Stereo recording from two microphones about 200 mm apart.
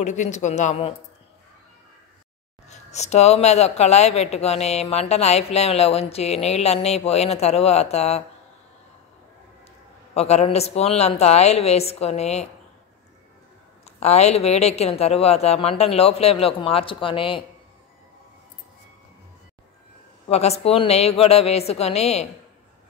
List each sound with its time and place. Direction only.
0.0 s a woman's voice: 35° left (ahead or behind)
2.7 s a woman's voice: 35° left (ahead or behind)
10.1 s a woman's voice: 30° left (ahead or behind)
13.9 s a woman's voice: 35° left (ahead or behind)
20.2 s a woman's voice: 30° left (ahead or behind)